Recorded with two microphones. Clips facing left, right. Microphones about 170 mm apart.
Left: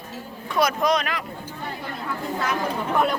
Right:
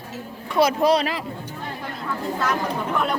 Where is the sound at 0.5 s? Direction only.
30° right (ahead or behind).